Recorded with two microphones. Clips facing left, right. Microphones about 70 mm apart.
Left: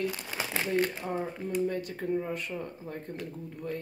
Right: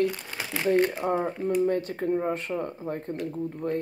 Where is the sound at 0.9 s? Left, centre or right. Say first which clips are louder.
Right 7 dB; right.